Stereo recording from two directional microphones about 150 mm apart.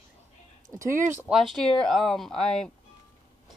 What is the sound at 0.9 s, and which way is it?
Speech, 55° right (ahead or behind).